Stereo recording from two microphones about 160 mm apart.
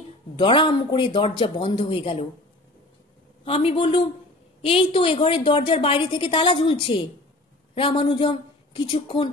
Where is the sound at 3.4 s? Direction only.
35° left (ahead or behind).